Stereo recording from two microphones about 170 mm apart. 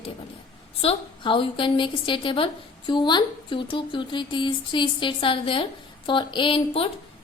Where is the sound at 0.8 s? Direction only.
35° left (ahead or behind).